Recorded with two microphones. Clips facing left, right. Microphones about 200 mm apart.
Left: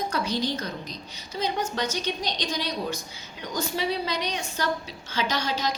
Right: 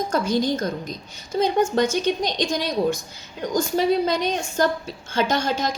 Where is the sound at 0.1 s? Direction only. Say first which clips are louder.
Right 6 dB; 45° right (ahead or behind).